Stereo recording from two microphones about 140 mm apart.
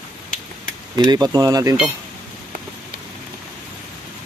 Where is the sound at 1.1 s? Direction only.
30° right (ahead or behind).